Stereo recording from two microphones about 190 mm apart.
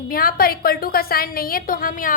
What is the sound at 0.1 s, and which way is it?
A woman's voice, 50° left (ahead or behind).